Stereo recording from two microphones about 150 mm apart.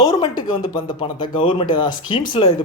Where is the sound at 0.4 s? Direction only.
30° left (ahead or behind).